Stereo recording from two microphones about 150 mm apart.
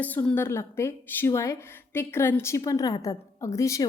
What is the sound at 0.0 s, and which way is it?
A woman's voice, 10° left (ahead or behind).